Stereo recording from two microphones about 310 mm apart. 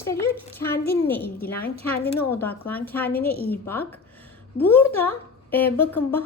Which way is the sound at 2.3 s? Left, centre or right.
Centre.